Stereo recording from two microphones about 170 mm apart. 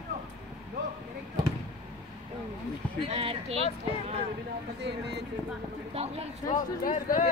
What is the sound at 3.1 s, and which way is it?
Speech, 35° right (ahead or behind).